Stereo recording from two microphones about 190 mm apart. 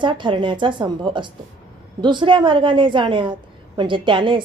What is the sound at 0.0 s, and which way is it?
A woman's voice, 25° right (ahead or behind).